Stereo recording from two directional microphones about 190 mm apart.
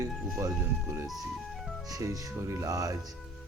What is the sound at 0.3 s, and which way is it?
Speech, 15° right (ahead or behind).